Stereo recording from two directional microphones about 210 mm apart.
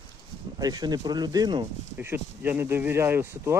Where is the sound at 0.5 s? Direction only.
20° right (ahead or behind).